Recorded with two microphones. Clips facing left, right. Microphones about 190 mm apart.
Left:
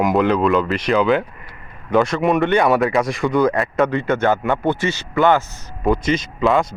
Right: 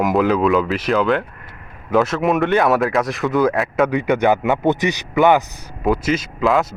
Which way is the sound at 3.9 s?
15° right (ahead or behind).